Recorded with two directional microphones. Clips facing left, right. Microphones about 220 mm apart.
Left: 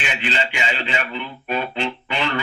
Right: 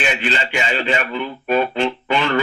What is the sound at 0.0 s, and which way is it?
A man's voice, 45° right (ahead or behind).